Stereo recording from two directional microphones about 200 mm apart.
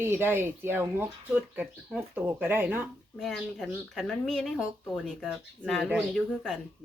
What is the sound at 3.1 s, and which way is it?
Speech, centre (ahead or behind).